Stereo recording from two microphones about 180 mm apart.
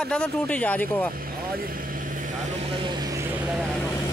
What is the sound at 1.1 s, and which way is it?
Speech, 55° right (ahead or behind).